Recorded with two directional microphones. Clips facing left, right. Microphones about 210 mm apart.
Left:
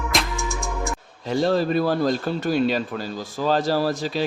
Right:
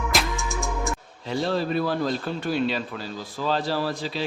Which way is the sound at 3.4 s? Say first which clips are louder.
Left 5 dB; 45° left (ahead or behind).